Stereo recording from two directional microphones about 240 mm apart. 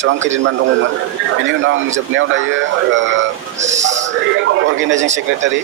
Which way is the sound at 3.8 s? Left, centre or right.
Right.